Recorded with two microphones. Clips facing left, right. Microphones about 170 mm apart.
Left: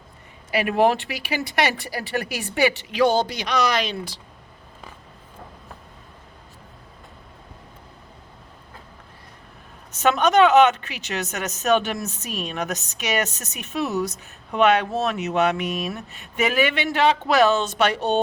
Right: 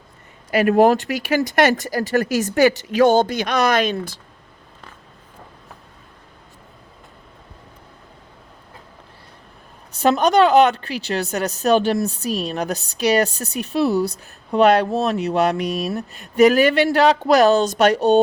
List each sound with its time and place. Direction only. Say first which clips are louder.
0.5 s speech: right 5 dB; 45° right (ahead or behind)
9.9 s speech: right 2 dB; 35° right (ahead or behind)